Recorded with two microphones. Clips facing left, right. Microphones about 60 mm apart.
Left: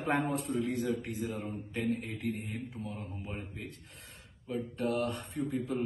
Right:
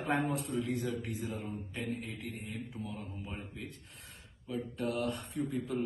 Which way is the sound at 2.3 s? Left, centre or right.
Left.